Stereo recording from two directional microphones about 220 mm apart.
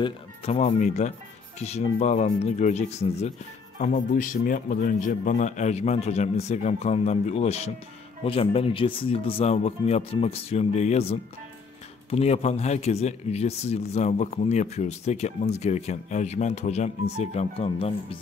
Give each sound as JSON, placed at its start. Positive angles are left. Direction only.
{"t": 0.0, "sound": "a man's voice", "side_deg": 30}